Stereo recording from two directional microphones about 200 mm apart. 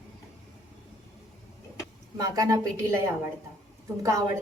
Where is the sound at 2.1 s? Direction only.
20° right (ahead or behind).